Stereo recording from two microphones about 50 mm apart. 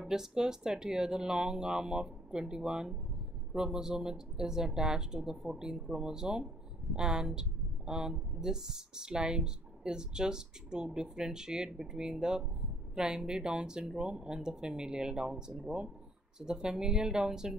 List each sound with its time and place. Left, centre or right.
0.1 s speech: centre